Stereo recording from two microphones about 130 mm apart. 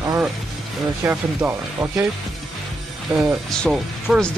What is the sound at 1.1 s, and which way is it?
Speech, 20° right (ahead or behind).